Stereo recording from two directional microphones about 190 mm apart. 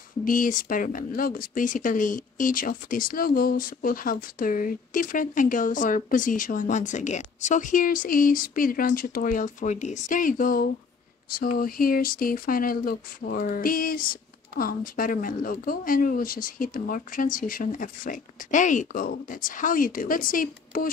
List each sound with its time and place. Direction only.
0.2 s speech: 45° left (ahead or behind)